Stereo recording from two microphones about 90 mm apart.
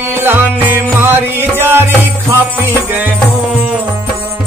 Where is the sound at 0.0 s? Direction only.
25° right (ahead or behind).